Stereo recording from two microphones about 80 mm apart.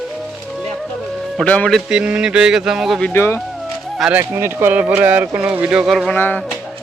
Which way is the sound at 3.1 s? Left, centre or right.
Left.